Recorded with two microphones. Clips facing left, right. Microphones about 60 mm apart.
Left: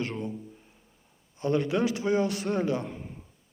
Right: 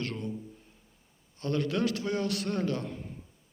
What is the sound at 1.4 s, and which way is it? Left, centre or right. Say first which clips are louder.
A man's voice: left 3 dB; centre.